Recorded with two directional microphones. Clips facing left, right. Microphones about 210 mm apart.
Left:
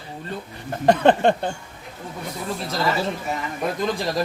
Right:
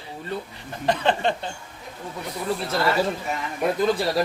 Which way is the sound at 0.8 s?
50° left (ahead or behind).